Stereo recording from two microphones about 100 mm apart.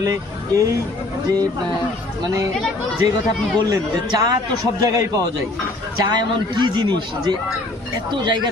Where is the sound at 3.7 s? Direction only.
40° right (ahead or behind).